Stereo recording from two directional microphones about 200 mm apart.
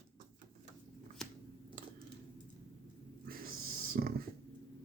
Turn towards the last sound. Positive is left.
turn(degrees=-50)  # may be behind; listen again after turning